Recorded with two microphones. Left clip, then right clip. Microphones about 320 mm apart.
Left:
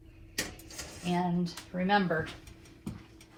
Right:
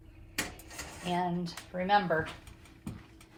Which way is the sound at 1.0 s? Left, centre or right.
Right.